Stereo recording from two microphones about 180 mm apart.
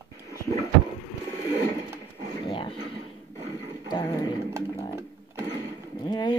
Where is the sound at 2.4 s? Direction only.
25° left (ahead or behind).